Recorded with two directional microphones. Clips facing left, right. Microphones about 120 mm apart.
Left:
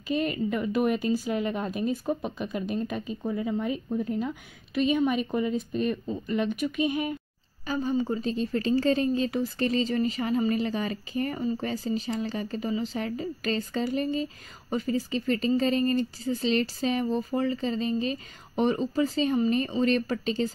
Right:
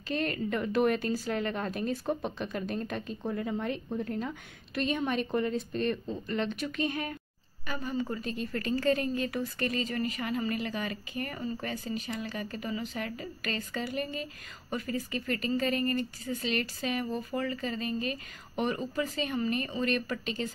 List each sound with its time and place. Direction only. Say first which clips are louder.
0.1 s speech: left 4 dB; 5° left (ahead or behind)
7.6 s speech: left 6 dB; 30° left (ahead or behind)